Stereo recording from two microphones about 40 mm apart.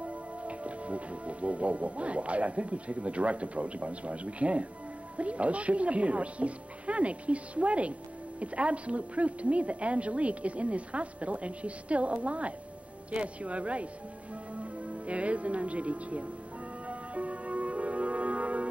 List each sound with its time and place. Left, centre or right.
0.0 s speech: right
16.8 s music: right